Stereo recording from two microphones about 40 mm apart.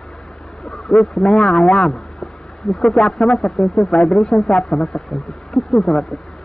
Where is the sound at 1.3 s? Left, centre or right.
Centre.